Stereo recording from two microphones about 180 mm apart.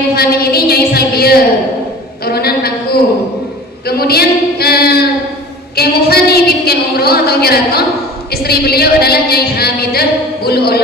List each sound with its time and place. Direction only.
0.1 s a woman's voice: 60° left (ahead or behind)
5.8 s a sound: 60° left (ahead or behind)
8.3 s a woman's voice: 60° left (ahead or behind)